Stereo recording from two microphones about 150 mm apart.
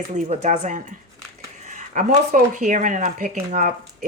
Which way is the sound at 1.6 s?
55° right (ahead or behind).